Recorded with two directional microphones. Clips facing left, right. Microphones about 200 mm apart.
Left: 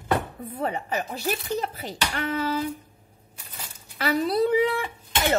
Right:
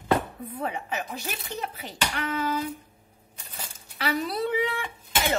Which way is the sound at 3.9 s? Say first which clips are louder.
Left 5 dB; 45° left (ahead or behind).